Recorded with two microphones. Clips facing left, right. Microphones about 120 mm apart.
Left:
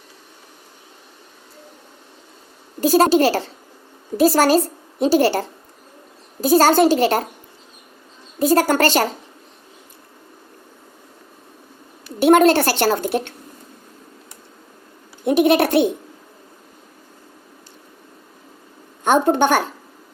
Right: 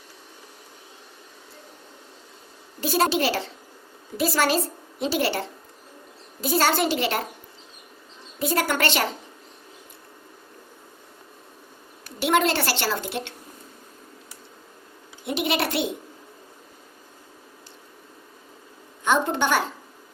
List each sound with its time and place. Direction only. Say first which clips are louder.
2.8 s a woman's voice: left 8 dB; 40° left (ahead or behind)
8.4 s a woman's voice: left 8 dB; 40° left (ahead or behind)
12.2 s a woman's voice: left 9 dB; 50° left (ahead or behind)
15.2 s a woman's voice: left 10 dB; 50° left (ahead or behind)
19.0 s a woman's voice: left 7 dB; 50° left (ahead or behind)